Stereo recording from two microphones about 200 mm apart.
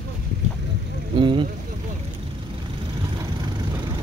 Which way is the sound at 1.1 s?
25° right (ahead or behind).